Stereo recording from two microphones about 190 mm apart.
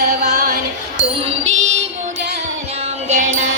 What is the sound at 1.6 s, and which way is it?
Music, 35° right (ahead or behind).